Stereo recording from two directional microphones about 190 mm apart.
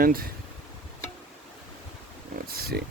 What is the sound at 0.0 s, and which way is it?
Speech, 50° right (ahead or behind).